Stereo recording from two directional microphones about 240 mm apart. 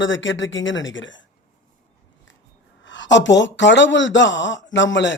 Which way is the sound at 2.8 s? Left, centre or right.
Left.